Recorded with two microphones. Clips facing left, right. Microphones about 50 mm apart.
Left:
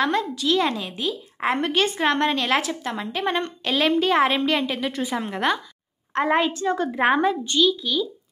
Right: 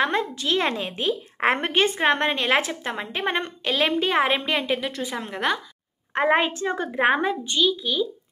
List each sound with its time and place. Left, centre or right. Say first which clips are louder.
0.0 s a woman's voice: left 1 dB; right
3.6 s speech: left 2 dB; centre
4.9 s a woman's voice: left 3 dB; centre
6.1 s a woman's voice: even; right
6.8 s speech: left 1 dB; centre